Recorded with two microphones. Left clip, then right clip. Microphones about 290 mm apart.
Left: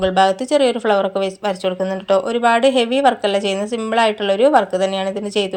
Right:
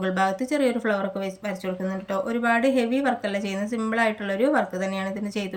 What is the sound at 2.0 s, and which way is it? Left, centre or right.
A woman's voice, centre.